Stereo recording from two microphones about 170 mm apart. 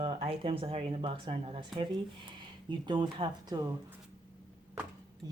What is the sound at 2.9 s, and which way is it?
Speech, 25° right (ahead or behind).